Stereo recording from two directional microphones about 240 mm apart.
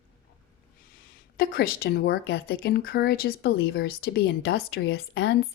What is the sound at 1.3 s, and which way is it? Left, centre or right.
A woman's voice, left.